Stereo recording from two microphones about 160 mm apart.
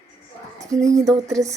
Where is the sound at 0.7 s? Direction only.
20° right (ahead or behind).